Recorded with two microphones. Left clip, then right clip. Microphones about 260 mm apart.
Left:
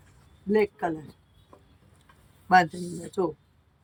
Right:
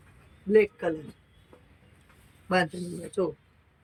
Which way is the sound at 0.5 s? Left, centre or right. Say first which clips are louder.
Right 2 dB; centre.